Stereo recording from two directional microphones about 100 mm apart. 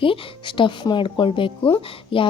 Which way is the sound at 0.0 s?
55° left (ahead or behind).